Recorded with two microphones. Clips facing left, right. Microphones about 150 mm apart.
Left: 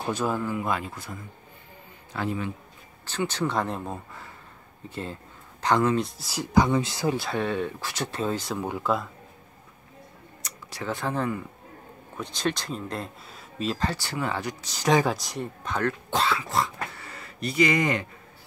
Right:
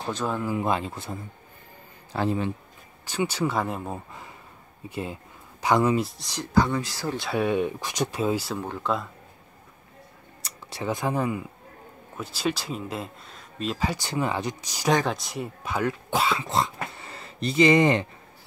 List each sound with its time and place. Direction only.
0.0 s speech: 10° left (ahead or behind)
0.6 s a man's voice: 25° right (ahead or behind)
3.1 s speech: 10° right (ahead or behind); by 7.2 s 20° left (ahead or behind)
7.3 s speech: 15° right (ahead or behind)
8.6 s speech: 5° left (ahead or behind)
10.4 s a sound: 25° right (ahead or behind)
10.9 s speech: 15° right (ahead or behind); by 13.7 s 5° left (ahead or behind)
13.7 s speech: 15° right (ahead or behind)
14.9 s speech: centre (ahead or behind)
16.3 s speech: 20° right (ahead or behind)
16.9 s a sound: 25° right (ahead or behind)